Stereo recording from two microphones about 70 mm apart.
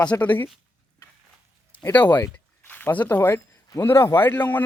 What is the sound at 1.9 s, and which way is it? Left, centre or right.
A man's voice, left.